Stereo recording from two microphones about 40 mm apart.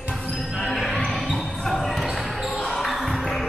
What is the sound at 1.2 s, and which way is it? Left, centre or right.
Basketball bounce, centre.